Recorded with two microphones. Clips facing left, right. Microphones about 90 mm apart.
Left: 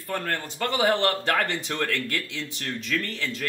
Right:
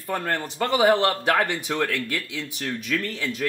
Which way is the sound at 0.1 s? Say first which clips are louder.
Right 3 dB; 20° right (ahead or behind).